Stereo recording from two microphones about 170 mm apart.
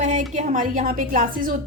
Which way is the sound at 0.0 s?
45° right (ahead or behind).